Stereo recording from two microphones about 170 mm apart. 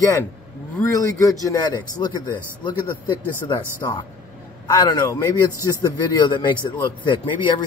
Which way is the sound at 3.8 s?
25° left (ahead or behind).